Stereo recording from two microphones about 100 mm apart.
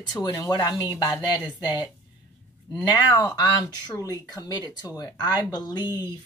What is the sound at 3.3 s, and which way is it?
Speech, 40° left (ahead or behind).